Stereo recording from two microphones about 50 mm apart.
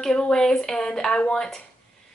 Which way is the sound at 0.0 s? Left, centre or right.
Centre.